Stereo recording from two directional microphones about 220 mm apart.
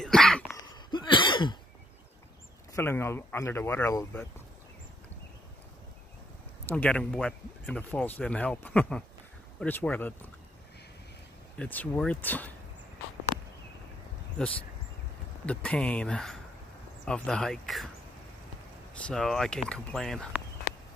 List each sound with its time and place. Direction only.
0.0 s cough: centre (ahead or behind)
0.8 s a sound: 20° left (ahead or behind)
2.7 s speech: 10° left (ahead or behind)
6.7 s speech: 5° left (ahead or behind)
11.5 s speech: 5° left (ahead or behind)
15.4 s speech: 5° left (ahead or behind)
19.0 s speech: centre (ahead or behind)